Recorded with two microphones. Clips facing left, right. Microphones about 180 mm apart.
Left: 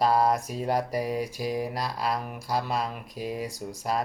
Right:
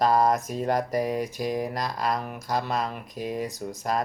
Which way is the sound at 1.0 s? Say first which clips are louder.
Right 2 dB; 45° right (ahead or behind).